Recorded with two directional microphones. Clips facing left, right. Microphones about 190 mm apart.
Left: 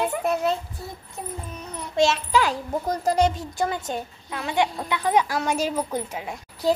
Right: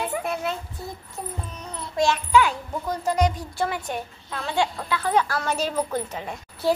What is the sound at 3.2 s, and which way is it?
A child's voice, 25° left (ahead or behind).